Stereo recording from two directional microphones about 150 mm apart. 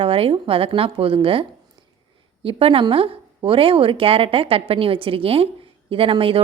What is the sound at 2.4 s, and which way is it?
Speech, 40° right (ahead or behind).